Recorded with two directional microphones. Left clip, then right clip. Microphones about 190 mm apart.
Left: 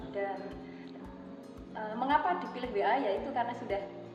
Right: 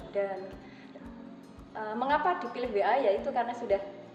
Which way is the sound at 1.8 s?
55° right (ahead or behind).